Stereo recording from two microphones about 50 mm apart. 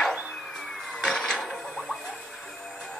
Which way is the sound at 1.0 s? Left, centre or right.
Centre.